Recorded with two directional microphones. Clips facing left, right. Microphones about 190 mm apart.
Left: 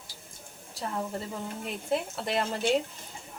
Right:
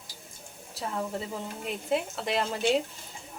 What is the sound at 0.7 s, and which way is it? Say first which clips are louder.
A woman's voice: right 1 dB; centre (ahead or behind).